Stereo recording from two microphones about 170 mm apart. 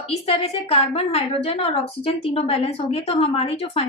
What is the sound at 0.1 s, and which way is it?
A woman's voice, 35° left (ahead or behind).